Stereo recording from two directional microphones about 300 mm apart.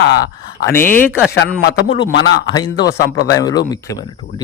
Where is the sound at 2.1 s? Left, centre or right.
Left.